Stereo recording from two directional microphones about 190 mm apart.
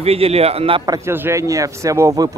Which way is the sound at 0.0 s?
30° right (ahead or behind).